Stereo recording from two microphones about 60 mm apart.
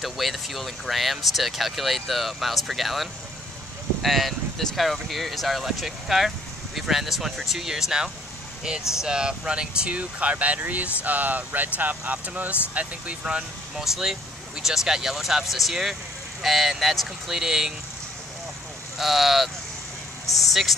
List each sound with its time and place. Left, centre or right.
0.0 s speech: centre
13.8 s speech: centre
18.9 s speech: centre